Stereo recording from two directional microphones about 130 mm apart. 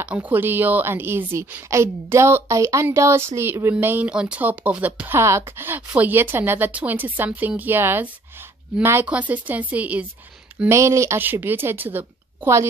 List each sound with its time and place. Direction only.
0.0 s a woman's voice: 10° right (ahead or behind)
10.7 s a woman's voice: 20° right (ahead or behind)